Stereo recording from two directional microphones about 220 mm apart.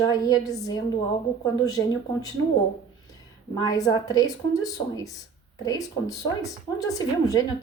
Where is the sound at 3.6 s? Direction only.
15° left (ahead or behind).